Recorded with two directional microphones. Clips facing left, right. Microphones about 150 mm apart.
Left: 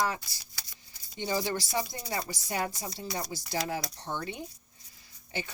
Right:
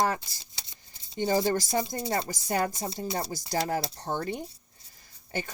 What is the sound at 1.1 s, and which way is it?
Speech, 50° right (ahead or behind).